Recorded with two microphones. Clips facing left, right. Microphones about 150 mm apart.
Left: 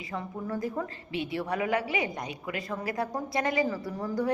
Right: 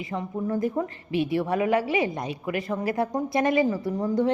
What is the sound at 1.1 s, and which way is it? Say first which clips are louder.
Speech: right 8 dB; 25° left (ahead or behind).